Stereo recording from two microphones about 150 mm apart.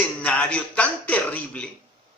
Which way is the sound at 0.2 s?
5° left (ahead or behind).